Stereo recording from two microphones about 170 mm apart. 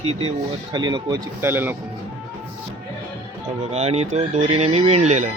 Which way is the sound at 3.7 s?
40° right (ahead or behind).